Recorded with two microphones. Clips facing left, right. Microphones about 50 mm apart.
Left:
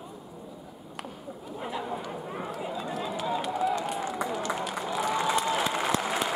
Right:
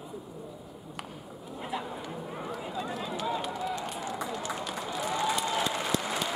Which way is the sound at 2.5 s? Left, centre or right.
Centre.